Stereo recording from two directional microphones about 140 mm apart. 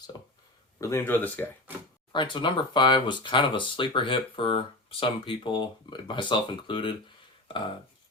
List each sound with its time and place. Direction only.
0.8 s speech: 20° left (ahead or behind)
2.1 s speech: 35° left (ahead or behind)
7.4 s a sound: 35° left (ahead or behind)